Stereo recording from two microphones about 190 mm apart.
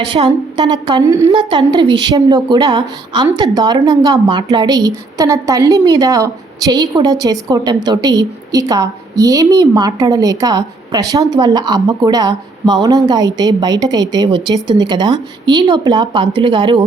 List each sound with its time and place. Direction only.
0.1 s a woman's voice: 25° right (ahead or behind)
1.3 s a woman's voice: 25° right (ahead or behind)